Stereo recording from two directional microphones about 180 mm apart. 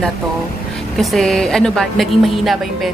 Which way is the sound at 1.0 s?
Centre (ahead or behind).